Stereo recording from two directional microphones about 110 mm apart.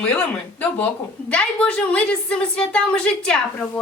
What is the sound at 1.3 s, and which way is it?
A woman's voice, 10° left (ahead or behind).